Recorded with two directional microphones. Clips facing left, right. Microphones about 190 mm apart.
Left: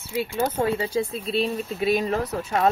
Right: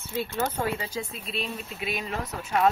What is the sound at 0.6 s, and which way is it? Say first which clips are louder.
Speech: left 7 dB; 30° left (ahead or behind).